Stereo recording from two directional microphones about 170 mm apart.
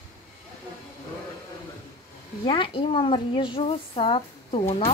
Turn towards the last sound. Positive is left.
turn(degrees=35)  # may be behind; listen again after turning